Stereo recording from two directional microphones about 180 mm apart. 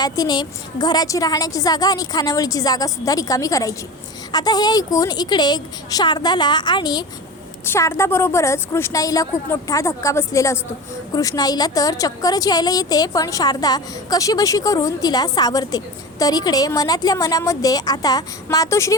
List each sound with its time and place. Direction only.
0.0 s a woman's voice: 25° left (ahead or behind)